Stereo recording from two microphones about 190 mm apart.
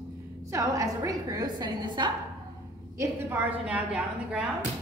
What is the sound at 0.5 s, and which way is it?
A woman's voice, 15° right (ahead or behind).